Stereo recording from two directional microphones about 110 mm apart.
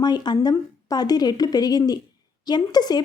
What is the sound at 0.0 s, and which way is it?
Speech, 40° left (ahead or behind).